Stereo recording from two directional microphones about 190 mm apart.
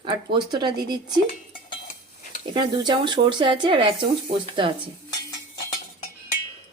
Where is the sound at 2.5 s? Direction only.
25° right (ahead or behind).